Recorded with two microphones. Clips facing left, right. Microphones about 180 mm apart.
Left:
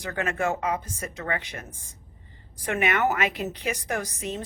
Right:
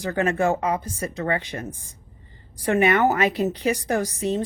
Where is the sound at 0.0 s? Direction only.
35° right (ahead or behind).